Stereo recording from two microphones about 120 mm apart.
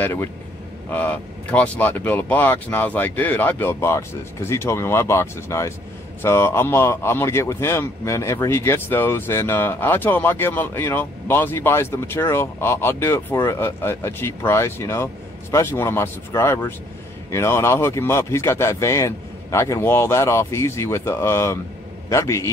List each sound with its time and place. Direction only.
0.0 s speech: 15° left (ahead or behind)